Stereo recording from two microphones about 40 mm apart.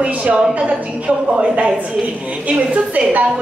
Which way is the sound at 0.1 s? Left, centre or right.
Right.